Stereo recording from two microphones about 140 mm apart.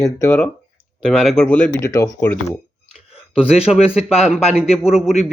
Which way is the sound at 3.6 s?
45° left (ahead or behind).